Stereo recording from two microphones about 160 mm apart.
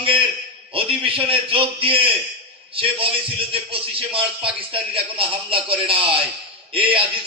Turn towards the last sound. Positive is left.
turn(degrees=-35)  # may be behind; listen again after turning